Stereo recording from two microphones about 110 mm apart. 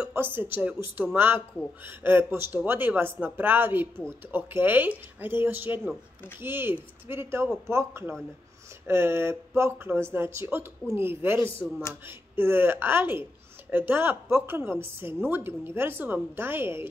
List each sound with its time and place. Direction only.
0.0 s a woman's voice: 20° right (ahead or behind)